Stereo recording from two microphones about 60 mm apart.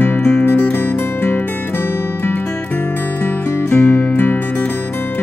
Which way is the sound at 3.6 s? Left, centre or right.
Left.